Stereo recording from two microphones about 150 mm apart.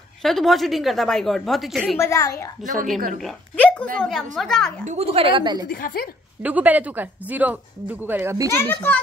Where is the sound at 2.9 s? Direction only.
60° right (ahead or behind).